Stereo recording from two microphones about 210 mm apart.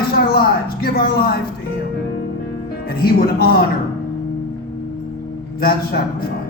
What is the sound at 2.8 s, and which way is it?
Speech, 45° left (ahead or behind).